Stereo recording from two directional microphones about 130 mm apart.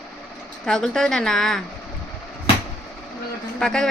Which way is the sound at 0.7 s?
5° left (ahead or behind).